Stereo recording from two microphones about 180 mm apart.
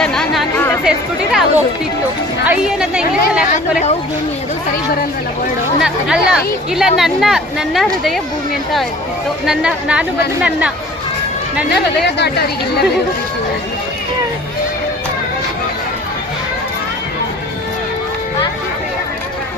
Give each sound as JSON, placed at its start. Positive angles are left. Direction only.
{"t": 0.0, "sound": "music", "side_deg": 5}
{"t": 0.9, "sound": "speech", "side_deg": -5}
{"t": 5.8, "sound": "speech", "side_deg": 0}
{"t": 9.5, "sound": "speech", "side_deg": -5}
{"t": 12.1, "sound": "speech", "side_deg": 65}